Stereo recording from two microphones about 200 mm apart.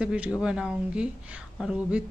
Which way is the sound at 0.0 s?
5° right (ahead or behind).